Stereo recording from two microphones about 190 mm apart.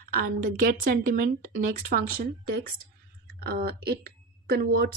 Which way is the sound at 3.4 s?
55° right (ahead or behind).